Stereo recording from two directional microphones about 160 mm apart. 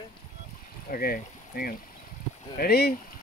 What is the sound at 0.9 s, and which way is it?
Speech, 70° left (ahead or behind).